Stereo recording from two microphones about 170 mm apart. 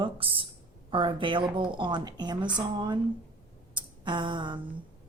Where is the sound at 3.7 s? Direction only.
30° right (ahead or behind).